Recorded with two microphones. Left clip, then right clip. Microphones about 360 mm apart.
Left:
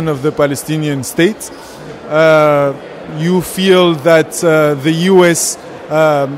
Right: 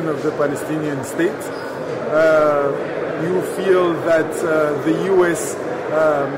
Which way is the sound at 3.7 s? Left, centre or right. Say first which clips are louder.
Left 7 dB; left.